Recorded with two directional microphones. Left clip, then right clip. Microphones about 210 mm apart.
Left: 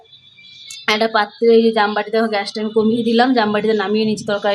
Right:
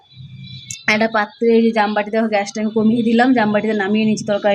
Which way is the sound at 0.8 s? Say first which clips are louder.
Even; 5° right (ahead or behind).